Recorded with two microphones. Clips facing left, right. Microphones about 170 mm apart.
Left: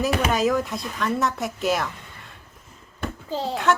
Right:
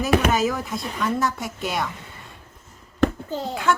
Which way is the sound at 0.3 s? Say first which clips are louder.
Left 1 dB; centre (ahead or behind).